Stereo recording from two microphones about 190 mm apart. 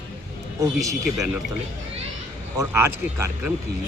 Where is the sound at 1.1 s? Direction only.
5° right (ahead or behind).